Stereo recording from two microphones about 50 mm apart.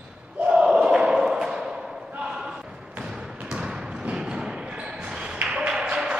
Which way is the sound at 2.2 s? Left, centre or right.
Centre.